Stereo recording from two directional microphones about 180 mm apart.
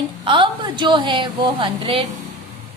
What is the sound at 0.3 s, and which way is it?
A woman's voice, 30° right (ahead or behind).